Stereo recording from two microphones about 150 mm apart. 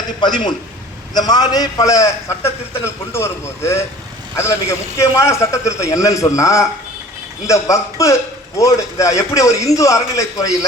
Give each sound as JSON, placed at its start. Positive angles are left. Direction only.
{"t": 0.2, "sound": "a man's voice", "side_deg": 30}